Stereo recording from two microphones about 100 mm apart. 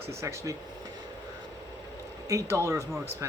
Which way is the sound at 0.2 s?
30° right (ahead or behind).